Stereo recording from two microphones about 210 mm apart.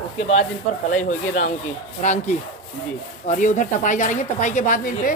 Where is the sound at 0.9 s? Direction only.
35° left (ahead or behind).